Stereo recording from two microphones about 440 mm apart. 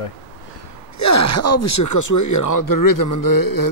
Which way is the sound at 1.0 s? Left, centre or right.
Left.